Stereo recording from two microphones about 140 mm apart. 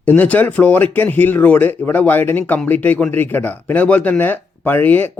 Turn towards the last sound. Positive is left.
turn(degrees=15)  # may be behind; listen again after turning